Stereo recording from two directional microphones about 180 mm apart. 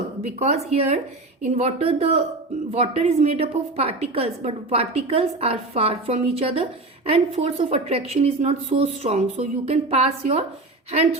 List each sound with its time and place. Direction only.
0.2 s a woman's voice: 35° right (ahead or behind)